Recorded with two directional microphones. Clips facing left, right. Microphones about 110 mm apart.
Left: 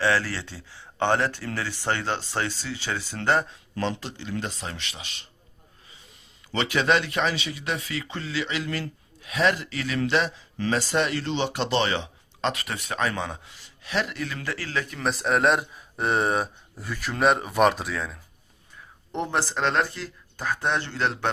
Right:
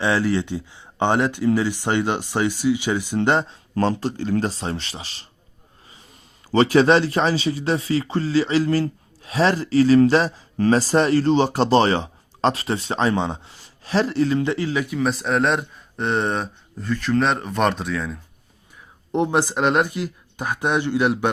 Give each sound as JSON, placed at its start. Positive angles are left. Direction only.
{"t": 0.0, "sound": "speech", "side_deg": -15}
{"t": 3.8, "sound": "speech", "side_deg": -40}
{"t": 6.5, "sound": "speech", "side_deg": -35}
{"t": 14.9, "sound": "speech", "side_deg": 0}
{"t": 19.1, "sound": "speech", "side_deg": -15}